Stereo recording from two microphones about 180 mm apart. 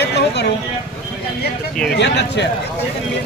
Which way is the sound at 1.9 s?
75° left (ahead or behind).